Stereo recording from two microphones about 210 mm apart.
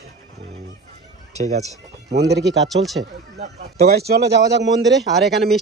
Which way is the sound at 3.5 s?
50° right (ahead or behind).